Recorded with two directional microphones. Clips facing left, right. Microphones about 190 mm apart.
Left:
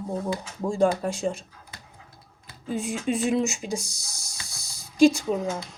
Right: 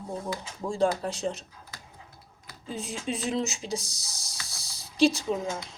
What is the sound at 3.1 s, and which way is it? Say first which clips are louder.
Speech: left 5 dB; 15° left (ahead or behind).